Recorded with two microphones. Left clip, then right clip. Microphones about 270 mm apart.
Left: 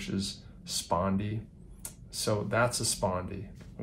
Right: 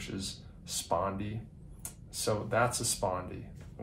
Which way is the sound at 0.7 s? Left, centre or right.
Left.